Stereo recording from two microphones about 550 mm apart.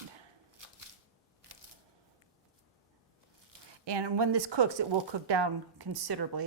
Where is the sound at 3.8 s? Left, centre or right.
Right.